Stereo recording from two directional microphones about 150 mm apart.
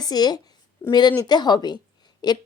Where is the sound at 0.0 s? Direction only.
25° left (ahead or behind).